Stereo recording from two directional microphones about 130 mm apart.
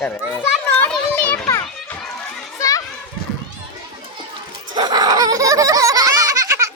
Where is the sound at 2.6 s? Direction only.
25° left (ahead or behind).